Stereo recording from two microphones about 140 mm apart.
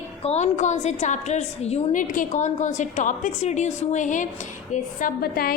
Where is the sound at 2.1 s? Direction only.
65° left (ahead or behind).